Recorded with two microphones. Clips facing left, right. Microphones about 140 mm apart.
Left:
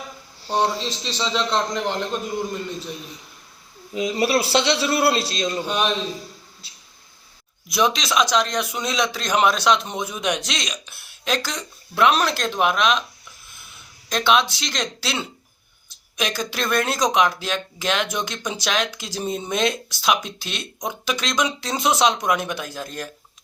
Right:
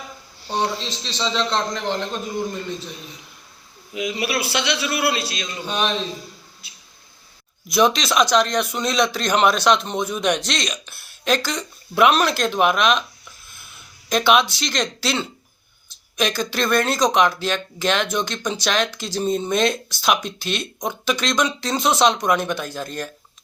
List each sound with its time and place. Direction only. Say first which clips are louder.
0.5 s speech: left 2 dB; 5° left (ahead or behind)
3.9 s a man's voice: left 4 dB; 35° left (ahead or behind)
5.6 s speech: right 3 dB; 5° left (ahead or behind)
7.7 s speech: right 3 dB; centre (ahead or behind)
14.1 s speech: right 2 dB; 5° right (ahead or behind)